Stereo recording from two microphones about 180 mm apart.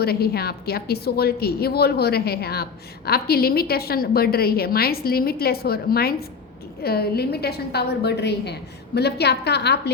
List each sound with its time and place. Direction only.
0.0 s a woman's voice: 60° left (ahead or behind)